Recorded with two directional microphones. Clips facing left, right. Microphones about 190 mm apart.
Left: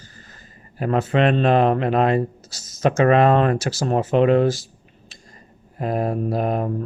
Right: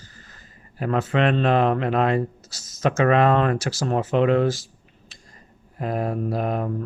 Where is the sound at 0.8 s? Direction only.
35° left (ahead or behind).